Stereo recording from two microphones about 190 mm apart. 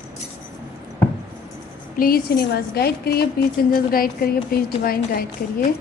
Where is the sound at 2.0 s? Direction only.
50° left (ahead or behind).